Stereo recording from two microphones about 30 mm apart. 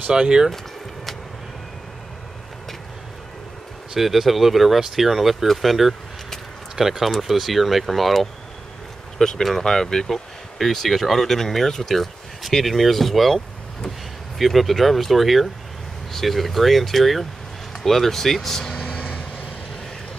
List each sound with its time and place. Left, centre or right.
0.1 s speech: right
4.0 s speech: centre
9.4 s speech: centre
14.4 s speech: centre